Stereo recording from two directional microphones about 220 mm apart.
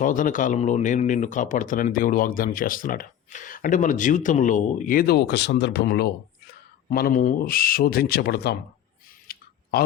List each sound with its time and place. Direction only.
0.0 s speech: 35° left (ahead or behind)
9.2 s clicking: 40° left (ahead or behind)